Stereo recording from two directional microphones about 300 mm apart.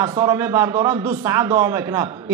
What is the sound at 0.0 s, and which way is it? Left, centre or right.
A man's voice, centre.